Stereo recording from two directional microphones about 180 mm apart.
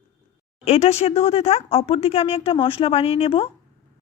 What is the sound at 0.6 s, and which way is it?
Speech, 35° left (ahead or behind).